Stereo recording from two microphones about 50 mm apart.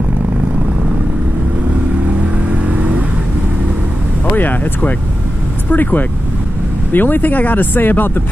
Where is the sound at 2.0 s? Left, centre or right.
Right.